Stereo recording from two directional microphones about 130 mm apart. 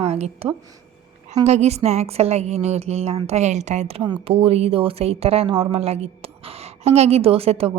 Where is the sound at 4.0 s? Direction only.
45° right (ahead or behind).